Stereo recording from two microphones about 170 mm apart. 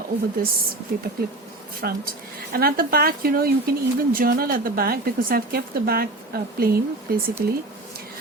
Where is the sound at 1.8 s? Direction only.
70° right (ahead or behind).